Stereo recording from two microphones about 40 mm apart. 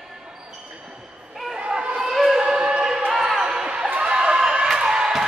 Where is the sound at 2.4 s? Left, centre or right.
Right.